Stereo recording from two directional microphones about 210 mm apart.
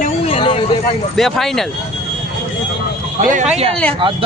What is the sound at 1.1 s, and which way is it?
Speech, centre (ahead or behind).